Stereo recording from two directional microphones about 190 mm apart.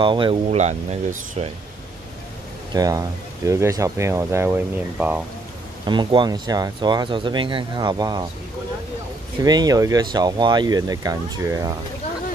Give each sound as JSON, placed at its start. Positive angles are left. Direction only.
{"t": 0.0, "sound": "speech", "side_deg": -25}
{"t": 2.7, "sound": "speech", "side_deg": -20}
{"t": 5.9, "sound": "speech", "side_deg": -25}
{"t": 9.4, "sound": "speech", "side_deg": -20}